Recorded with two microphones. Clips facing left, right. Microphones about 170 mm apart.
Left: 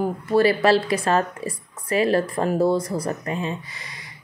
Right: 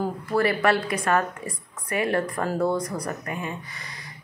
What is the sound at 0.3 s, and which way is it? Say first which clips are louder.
A woman's voice: left 5 dB; 25° left (ahead or behind).